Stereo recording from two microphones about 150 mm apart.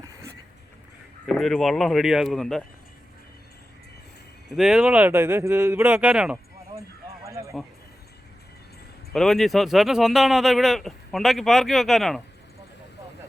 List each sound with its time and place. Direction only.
1.3 s speech: centre (ahead or behind)
4.4 s speech: centre (ahead or behind)
6.7 s a sound: 20° right (ahead or behind)
9.1 s speech: centre (ahead or behind)